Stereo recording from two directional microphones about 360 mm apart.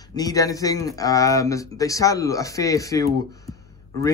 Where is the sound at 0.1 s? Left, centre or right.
Centre.